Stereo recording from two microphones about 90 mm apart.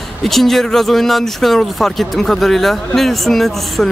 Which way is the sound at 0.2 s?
Centre (ahead or behind).